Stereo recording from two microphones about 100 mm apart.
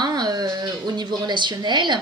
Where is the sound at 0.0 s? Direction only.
45° right (ahead or behind).